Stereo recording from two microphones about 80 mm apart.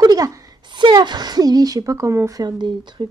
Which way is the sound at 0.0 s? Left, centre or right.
Right.